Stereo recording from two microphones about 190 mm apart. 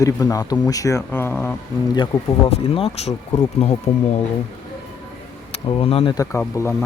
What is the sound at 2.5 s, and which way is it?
Speech, 30° left (ahead or behind).